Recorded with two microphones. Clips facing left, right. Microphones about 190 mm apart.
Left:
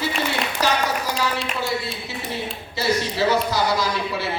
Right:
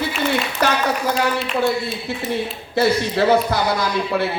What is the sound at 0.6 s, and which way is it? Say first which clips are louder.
Speech: right 2 dB; 55° right (ahead or behind).